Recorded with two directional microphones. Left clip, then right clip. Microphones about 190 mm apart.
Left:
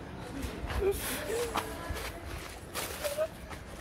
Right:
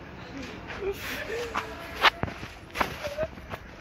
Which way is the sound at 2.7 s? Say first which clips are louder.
Right 4 dB; centre (ahead or behind).